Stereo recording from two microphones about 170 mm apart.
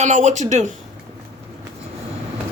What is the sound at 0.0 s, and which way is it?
Speech, 45° right (ahead or behind).